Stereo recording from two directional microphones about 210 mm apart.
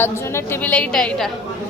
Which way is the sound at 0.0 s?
10° left (ahead or behind).